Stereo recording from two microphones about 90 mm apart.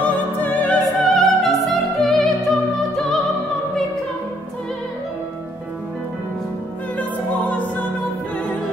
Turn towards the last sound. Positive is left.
turn(degrees=15)  # may be behind; listen again after turning